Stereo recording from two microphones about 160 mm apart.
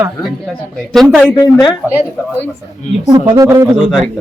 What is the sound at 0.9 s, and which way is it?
Speech, centre (ahead or behind).